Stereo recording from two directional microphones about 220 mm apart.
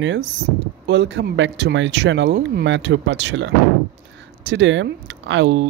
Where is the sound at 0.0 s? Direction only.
55° right (ahead or behind).